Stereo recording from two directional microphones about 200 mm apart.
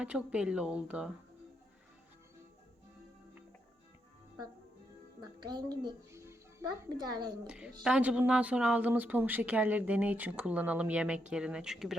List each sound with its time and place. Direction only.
0.0 s speech: 5° right (ahead or behind)
5.4 s a child's voice: 20° right (ahead or behind)
7.4 s speech: 5° right (ahead or behind)